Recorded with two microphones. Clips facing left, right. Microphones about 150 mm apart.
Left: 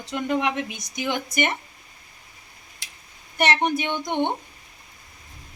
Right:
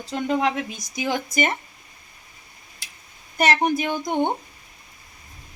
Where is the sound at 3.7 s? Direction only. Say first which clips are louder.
Right 2 dB; 35° right (ahead or behind).